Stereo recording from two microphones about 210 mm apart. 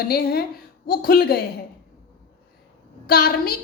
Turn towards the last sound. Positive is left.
turn(degrees=45)  # may be behind; listen again after turning